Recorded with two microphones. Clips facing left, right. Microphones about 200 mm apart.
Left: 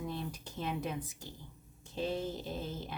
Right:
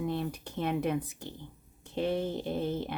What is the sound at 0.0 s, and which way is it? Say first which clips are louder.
Speech: right 7 dB; 60° right (ahead or behind).